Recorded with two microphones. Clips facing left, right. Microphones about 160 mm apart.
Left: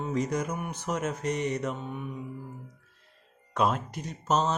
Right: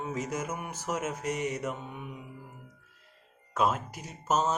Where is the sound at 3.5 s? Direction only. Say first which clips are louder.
Left 1 dB; 5° right (ahead or behind).